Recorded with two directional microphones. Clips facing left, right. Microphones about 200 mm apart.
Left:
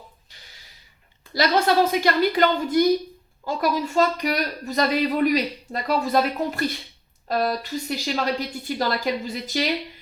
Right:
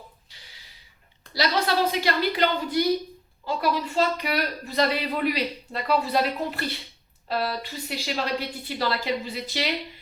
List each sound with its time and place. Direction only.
1.3 s a woman's voice: 50° left (ahead or behind)